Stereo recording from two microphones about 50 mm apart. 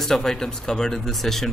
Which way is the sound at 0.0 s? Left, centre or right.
Centre.